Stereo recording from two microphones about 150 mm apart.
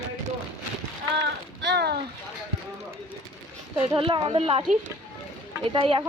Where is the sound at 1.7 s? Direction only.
90° right.